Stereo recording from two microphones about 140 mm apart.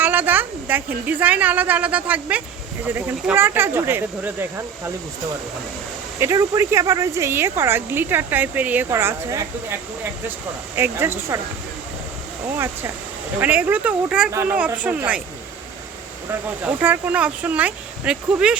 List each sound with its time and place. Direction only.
0.0 s a woman's voice: 15° right (ahead or behind)
6.1 s speech: 20° right (ahead or behind)
12.5 s speech: 15° right (ahead or behind)
16.6 s speech: 15° right (ahead or behind)